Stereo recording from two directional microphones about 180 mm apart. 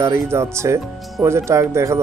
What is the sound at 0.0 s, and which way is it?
Speech, 15° right (ahead or behind).